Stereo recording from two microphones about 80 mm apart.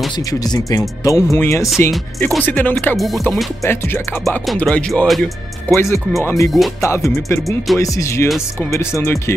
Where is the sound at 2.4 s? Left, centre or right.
Left.